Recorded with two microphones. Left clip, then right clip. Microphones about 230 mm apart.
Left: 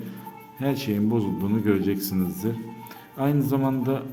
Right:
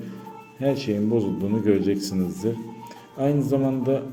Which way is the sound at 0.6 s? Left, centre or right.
Centre.